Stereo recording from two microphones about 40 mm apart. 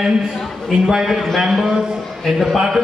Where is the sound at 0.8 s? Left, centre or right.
Centre.